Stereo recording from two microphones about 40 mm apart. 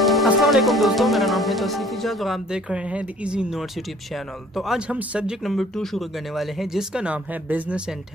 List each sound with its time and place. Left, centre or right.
0.0 s speech: centre
2.5 s speech: right
5.6 s speech: centre
6.3 s speech: centre